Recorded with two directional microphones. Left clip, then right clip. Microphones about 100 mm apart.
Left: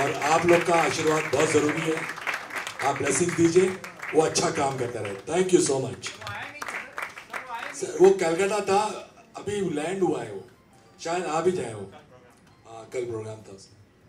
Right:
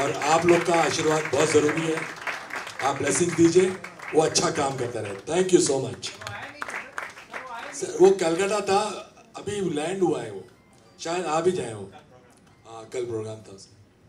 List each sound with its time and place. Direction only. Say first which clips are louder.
0.1 s speech: right 1 dB; 30° right (ahead or behind)
7.7 s a man's voice: even; 25° right (ahead or behind)
12.7 s speech: right 1 dB; 25° right (ahead or behind)